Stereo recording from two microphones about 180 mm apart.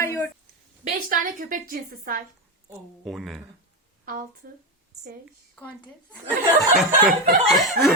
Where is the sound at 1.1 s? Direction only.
50° right (ahead or behind).